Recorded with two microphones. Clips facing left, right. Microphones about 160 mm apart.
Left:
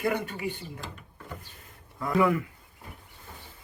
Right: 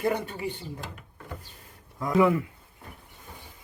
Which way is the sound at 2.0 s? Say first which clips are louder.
Right 2 dB; 20° right (ahead or behind).